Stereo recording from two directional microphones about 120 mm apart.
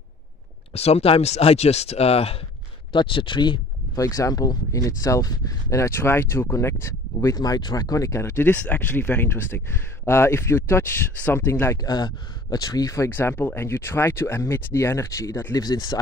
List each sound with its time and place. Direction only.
0.7 s speech: 60° left (ahead or behind)
2.9 s speech: 45° left (ahead or behind)
4.0 s speech: 30° left (ahead or behind)
15.6 s speech: 35° left (ahead or behind)